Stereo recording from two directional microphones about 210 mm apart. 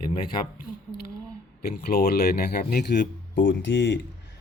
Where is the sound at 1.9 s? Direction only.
50° left (ahead or behind).